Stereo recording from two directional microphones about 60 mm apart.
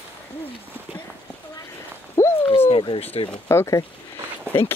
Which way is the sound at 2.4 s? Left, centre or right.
Left.